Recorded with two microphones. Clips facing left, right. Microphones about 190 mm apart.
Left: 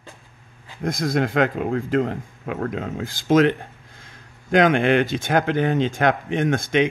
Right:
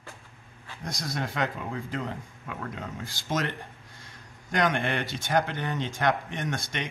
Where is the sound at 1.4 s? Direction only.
65° left (ahead or behind); by 3.6 s 90° left.